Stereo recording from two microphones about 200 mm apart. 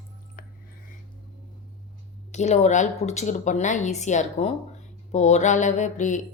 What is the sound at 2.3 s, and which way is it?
Speech, 35° left (ahead or behind).